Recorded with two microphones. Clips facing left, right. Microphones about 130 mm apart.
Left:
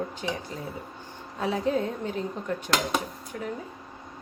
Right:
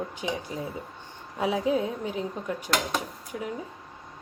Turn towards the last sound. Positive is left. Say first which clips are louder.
# even
turn(degrees=-10)  # may be behind; listen again after turning